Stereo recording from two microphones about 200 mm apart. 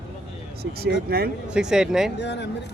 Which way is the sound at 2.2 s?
60° left (ahead or behind).